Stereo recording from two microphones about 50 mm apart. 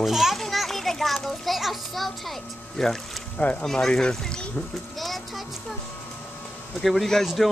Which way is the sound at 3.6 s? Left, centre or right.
Centre.